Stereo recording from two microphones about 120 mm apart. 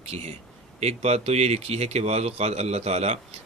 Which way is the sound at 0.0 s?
60° right (ahead or behind).